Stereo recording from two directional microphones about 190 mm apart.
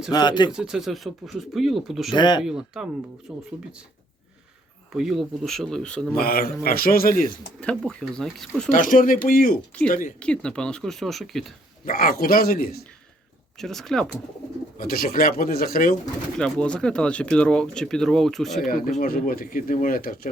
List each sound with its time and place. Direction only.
0.1 s speech: 25° left (ahead or behind)
0.5 s speech: 5° right (ahead or behind)
2.1 s speech: 25° left (ahead or behind)
2.4 s speech: 5° right (ahead or behind)
4.9 s speech: centre (ahead or behind)
6.1 s speech: 50° left (ahead or behind)
7.8 s speech: centre (ahead or behind)
8.7 s speech: 45° left (ahead or behind)
10.2 s speech: 5° left (ahead or behind)
11.9 s speech: 50° left (ahead or behind)
13.6 s speech: centre (ahead or behind)
14.8 s speech: 50° left (ahead or behind)
16.4 s speech: 5° left (ahead or behind)
18.6 s speech: 45° left (ahead or behind)